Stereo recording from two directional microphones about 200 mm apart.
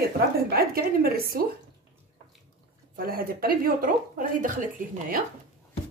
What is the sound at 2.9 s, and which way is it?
Speech, 45° right (ahead or behind).